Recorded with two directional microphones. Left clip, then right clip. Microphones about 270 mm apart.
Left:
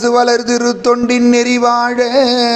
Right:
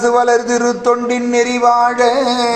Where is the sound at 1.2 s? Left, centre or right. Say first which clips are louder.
Left 3 dB; left.